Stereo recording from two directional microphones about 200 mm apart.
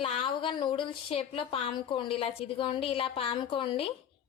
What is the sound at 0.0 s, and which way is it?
Speech, 25° left (ahead or behind).